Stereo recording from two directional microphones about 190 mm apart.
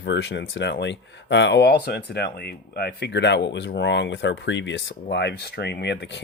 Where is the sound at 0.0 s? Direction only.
70° left (ahead or behind).